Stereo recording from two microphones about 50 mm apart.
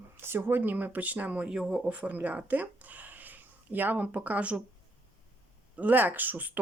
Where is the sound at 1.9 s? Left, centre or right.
Right.